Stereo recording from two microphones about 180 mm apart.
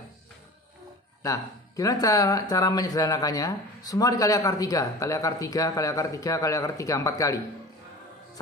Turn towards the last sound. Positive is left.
turn(degrees=20)  # may be behind; listen again after turning